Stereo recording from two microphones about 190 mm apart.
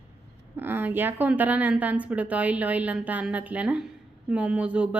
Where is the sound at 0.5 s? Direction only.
10° right (ahead or behind).